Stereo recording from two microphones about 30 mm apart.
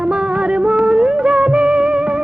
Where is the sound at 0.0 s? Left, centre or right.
Right.